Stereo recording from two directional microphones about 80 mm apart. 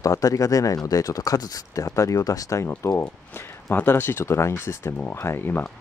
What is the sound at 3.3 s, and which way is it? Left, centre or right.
Speech, left.